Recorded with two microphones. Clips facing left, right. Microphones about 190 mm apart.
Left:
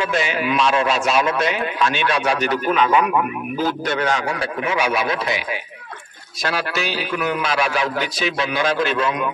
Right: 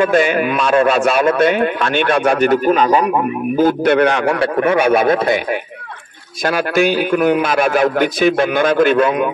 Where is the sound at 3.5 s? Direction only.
55° right (ahead or behind).